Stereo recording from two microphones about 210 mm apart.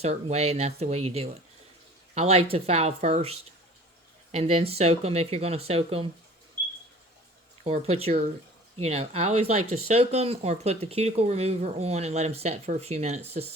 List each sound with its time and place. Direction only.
0.0 s speech: 30° right (ahead or behind)
7.6 s speech: 30° right (ahead or behind)